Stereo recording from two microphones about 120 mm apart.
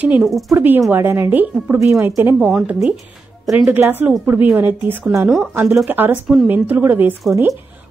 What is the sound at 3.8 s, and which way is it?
Speech, 15° right (ahead or behind).